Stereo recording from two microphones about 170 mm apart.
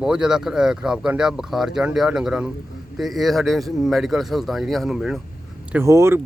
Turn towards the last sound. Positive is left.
turn(degrees=-15)  # may be behind; listen again after turning